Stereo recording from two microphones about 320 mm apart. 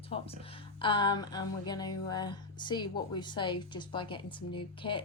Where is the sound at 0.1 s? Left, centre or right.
Centre.